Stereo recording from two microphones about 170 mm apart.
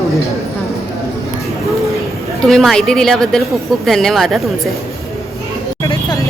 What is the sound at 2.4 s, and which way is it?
Speech, centre (ahead or behind).